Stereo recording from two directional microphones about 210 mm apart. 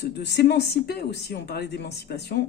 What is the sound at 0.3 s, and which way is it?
Speech, 55° left (ahead or behind).